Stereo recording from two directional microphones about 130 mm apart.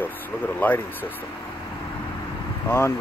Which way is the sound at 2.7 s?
15° left (ahead or behind).